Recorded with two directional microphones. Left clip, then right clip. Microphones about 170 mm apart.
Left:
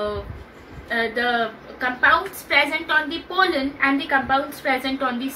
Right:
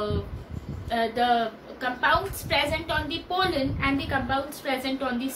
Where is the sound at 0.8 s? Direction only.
25° right (ahead or behind).